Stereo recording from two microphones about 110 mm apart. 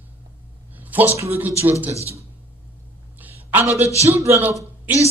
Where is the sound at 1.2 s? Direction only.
20° right (ahead or behind).